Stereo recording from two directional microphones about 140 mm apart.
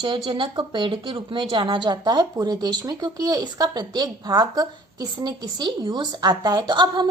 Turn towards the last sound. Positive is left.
turn(degrees=-30)  # may be behind; listen again after turning